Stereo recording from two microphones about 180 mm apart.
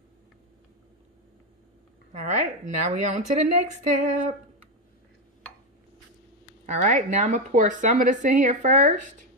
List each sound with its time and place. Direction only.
2.1 s a woman's voice: 40° right (ahead or behind)
6.6 s speech: 40° right (ahead or behind)